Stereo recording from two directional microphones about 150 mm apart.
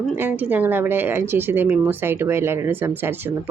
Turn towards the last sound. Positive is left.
turn(degrees=-15)  # may be behind; listen again after turning